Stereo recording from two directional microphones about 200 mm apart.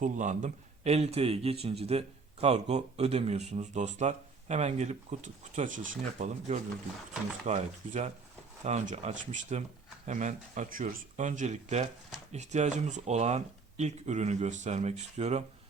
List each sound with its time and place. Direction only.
0.0 s a man's voice: 40° right (ahead or behind)